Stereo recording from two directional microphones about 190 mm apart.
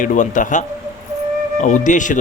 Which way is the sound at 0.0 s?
40° left (ahead or behind).